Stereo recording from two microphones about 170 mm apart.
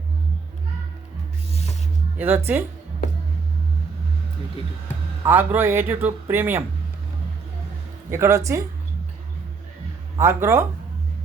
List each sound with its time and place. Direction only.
2.1 s speech: 10° right (ahead or behind)
5.2 s speech: 10° right (ahead or behind)
8.1 s speech: 15° right (ahead or behind)
10.2 s speech: 15° right (ahead or behind)